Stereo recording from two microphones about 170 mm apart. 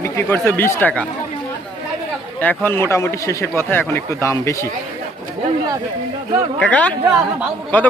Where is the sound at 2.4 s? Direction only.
10° left (ahead or behind).